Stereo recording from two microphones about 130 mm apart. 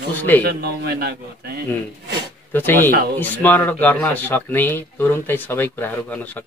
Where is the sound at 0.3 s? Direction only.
15° left (ahead or behind).